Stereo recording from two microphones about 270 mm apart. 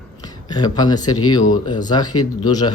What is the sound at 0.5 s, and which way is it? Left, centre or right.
Speech, centre.